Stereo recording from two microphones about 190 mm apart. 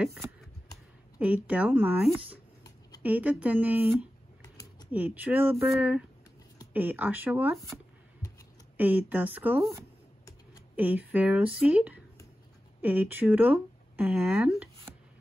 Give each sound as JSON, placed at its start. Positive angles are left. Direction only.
{"t": 1.2, "sound": "speech", "side_deg": -10}
{"t": 4.4, "sound": "a sound", "side_deg": 20}
{"t": 4.9, "sound": "speech", "side_deg": -10}